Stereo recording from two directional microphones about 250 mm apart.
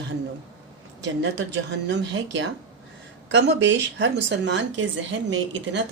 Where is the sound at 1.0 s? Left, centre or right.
Right.